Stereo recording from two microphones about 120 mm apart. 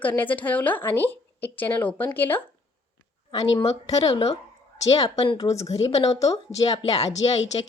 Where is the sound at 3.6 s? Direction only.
30° left (ahead or behind).